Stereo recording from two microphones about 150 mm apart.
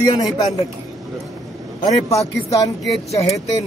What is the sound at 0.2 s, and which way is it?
Speech, 25° left (ahead or behind).